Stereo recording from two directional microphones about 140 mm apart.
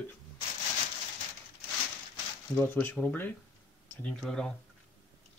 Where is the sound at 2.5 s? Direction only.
15° left (ahead or behind).